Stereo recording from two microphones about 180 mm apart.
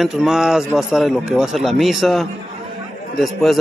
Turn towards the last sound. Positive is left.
turn(degrees=0)  # may be behind; listen again after turning